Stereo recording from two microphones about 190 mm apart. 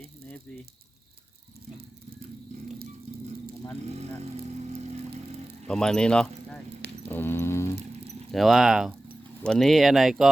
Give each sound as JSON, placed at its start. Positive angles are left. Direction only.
{"t": 3.9, "sound": "vehicle", "side_deg": -35}
{"t": 5.6, "sound": "speech", "side_deg": 5}
{"t": 7.1, "sound": "a sound", "side_deg": 10}
{"t": 8.3, "sound": "speech", "side_deg": 0}